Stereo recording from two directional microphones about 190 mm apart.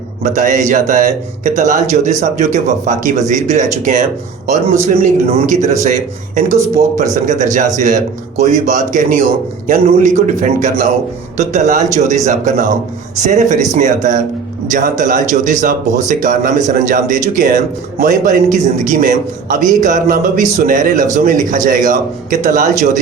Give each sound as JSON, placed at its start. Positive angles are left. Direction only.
{"t": 0.2, "sound": "speech", "side_deg": -45}